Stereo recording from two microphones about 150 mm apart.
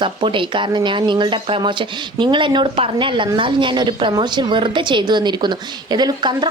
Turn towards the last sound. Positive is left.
turn(degrees=-30)  # may be behind; listen again after turning